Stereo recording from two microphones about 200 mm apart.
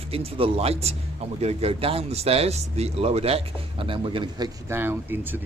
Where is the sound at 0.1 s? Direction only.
30° right (ahead or behind).